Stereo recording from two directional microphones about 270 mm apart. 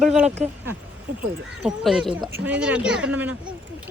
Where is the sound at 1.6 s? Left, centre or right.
Centre.